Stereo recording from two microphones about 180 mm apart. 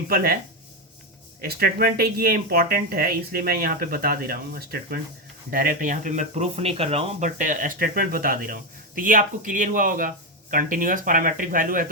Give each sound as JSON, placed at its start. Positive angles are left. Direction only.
{"t": 0.1, "sound": "speech", "side_deg": -55}
{"t": 1.4, "sound": "speech", "side_deg": -55}